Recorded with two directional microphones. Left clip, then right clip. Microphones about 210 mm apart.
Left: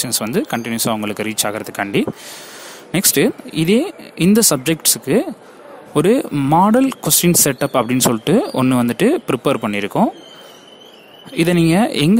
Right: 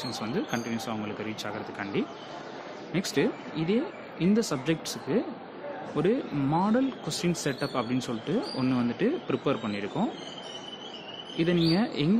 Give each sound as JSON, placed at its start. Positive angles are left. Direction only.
{"t": 0.0, "sound": "speech", "side_deg": 50}
{"t": 11.3, "sound": "speech", "side_deg": 50}